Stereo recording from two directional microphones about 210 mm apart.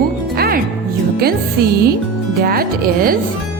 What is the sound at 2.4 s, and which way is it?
Music, 45° right (ahead or behind).